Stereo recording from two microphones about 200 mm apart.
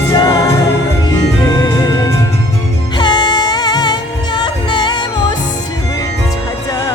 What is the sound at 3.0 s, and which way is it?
Music, 20° left (ahead or behind).